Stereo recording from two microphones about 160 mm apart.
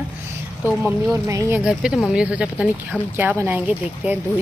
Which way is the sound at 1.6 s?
5° right (ahead or behind).